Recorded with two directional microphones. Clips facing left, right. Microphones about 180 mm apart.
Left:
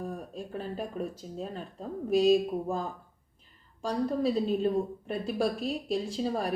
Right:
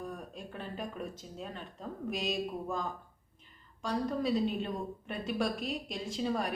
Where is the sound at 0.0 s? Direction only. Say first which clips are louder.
Left 5 dB; 35° left (ahead or behind).